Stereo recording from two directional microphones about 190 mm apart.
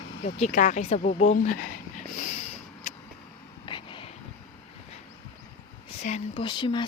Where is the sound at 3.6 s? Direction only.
25° left (ahead or behind).